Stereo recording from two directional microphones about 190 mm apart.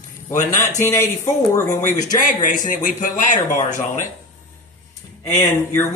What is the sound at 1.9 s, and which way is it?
Speech, 45° left (ahead or behind).